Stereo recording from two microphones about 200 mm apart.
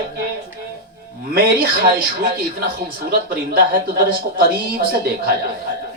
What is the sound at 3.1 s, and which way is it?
Speech, 50° right (ahead or behind).